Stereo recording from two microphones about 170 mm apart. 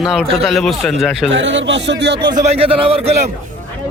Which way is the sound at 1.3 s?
90° right.